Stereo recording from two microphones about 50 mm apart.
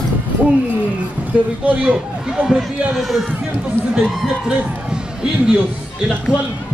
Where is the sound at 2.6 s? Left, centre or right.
Centre.